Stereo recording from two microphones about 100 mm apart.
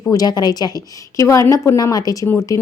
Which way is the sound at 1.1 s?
30° left (ahead or behind).